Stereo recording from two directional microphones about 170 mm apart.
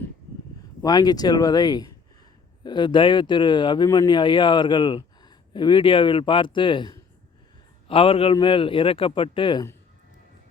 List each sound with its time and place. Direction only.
0.8 s a man's voice: 25° left (ahead or behind)